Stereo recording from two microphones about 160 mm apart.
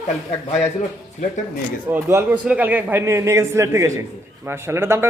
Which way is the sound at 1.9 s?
15° right (ahead or behind).